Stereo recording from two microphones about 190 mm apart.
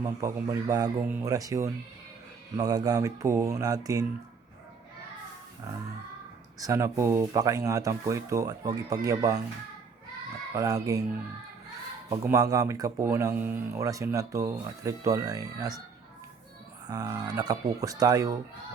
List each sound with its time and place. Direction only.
0.0 s speech: 15° right (ahead or behind)
6.6 s speech: 15° right (ahead or behind)
10.5 s speech: 20° right (ahead or behind)
12.2 s speech: 15° right (ahead or behind)
16.8 s speech: 20° right (ahead or behind)